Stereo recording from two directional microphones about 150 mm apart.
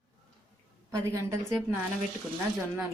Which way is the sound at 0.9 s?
20° right (ahead or behind).